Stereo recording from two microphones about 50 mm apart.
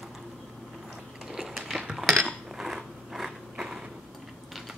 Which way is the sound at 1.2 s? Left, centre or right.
Centre.